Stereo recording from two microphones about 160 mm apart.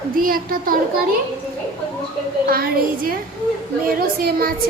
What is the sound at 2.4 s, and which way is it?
A child's voice, 65° right (ahead or behind).